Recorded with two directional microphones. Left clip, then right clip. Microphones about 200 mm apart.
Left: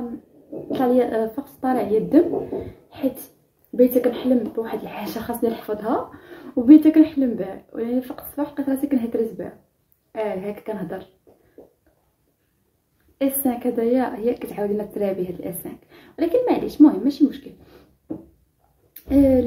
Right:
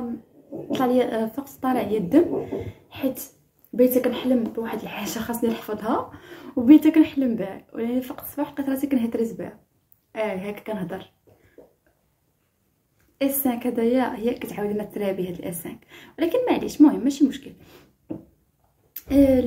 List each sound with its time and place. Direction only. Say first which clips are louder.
0.7 s a woman's voice: left 2 dB; 10° right (ahead or behind)
3.7 s a woman's voice: left 2 dB; 5° right (ahead or behind)
13.2 s a woman's voice: left 2 dB; 10° right (ahead or behind)
19.0 s a woman's voice: left 1 dB; 5° right (ahead or behind)